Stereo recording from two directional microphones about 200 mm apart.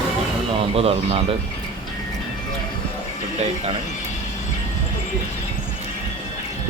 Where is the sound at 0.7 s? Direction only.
30° right (ahead or behind).